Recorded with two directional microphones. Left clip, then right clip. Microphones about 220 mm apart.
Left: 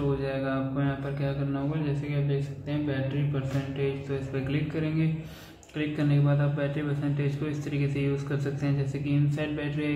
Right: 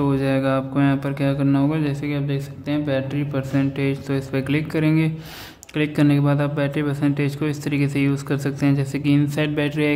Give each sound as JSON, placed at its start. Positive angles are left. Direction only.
{"t": 0.2, "sound": "speech", "side_deg": -50}